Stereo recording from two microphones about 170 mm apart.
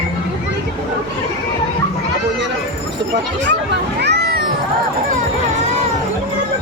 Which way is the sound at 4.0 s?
75° right (ahead or behind).